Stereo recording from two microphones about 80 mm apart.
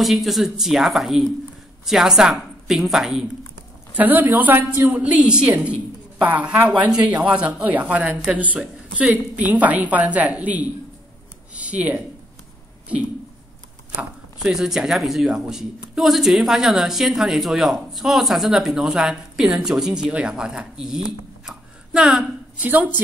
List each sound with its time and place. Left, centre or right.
0.0 s a woman's voice: centre
3.9 s a woman's voice: right
5.0 s a woman's voice: centre
11.5 s a sound: centre
14.4 s a woman's voice: centre
21.5 s a sound: centre
22.6 s a woman's voice: right